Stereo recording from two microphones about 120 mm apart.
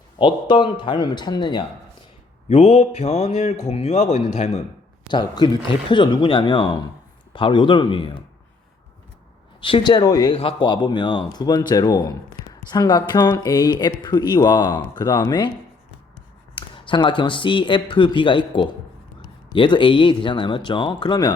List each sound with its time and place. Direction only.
0.2 s speech: 40° left (ahead or behind)
2.5 s a man's voice: 65° left (ahead or behind)
5.0 s speech: 35° left (ahead or behind)
9.6 s speech: 45° left (ahead or behind)
10.3 s speech: 45° left (ahead or behind)
16.6 s a man's voice: 40° left (ahead or behind)